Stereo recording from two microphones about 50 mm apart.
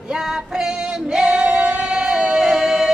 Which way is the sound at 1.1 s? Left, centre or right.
Centre.